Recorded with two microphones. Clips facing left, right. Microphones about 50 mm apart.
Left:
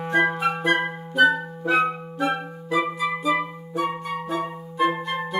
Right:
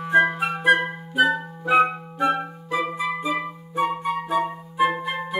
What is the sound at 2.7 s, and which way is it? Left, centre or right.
Music, right.